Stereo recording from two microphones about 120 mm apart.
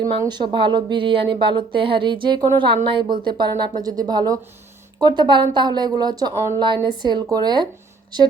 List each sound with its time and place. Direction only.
0.3 s speech: 40° right (ahead or behind)